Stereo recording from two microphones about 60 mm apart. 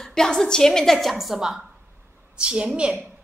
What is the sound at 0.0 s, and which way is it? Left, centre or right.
Speech, centre.